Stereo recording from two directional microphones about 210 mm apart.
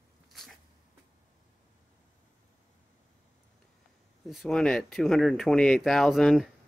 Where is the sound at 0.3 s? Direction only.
Centre (ahead or behind).